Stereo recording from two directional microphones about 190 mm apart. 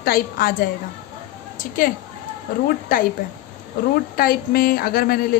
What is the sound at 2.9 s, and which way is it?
A woman's voice, 45° left (ahead or behind).